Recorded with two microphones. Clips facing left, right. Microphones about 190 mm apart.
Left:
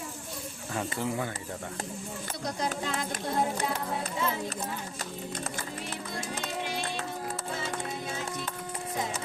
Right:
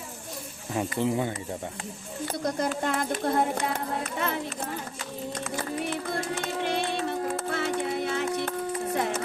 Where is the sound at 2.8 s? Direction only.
55° right (ahead or behind).